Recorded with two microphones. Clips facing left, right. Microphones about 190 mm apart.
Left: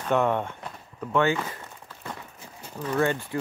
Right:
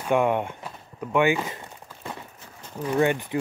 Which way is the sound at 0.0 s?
10° right (ahead or behind).